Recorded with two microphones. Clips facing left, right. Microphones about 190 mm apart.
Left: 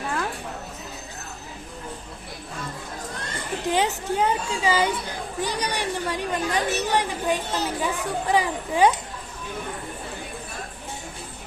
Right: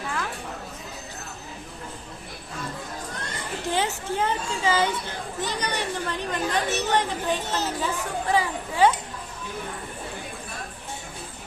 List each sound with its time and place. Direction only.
3.7 s speech: 15° left (ahead or behind)